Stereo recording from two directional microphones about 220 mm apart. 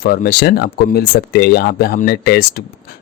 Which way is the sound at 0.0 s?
40° left (ahead or behind).